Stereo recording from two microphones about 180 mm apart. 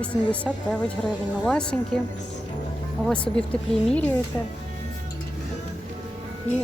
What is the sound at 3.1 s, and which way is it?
A woman's voice, 5° left (ahead or behind).